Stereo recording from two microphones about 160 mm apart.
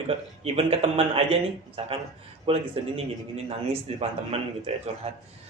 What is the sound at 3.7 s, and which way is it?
A man's voice, 40° right (ahead or behind).